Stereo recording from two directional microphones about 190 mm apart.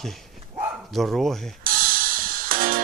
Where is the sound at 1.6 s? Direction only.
50° right (ahead or behind).